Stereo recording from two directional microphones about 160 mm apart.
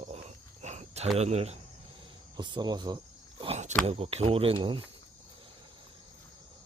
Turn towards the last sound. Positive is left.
turn(degrees=-30)  # may be behind; listen again after turning